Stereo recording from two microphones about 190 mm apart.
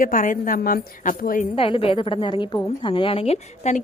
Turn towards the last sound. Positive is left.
turn(degrees=35)  # may be behind; listen again after turning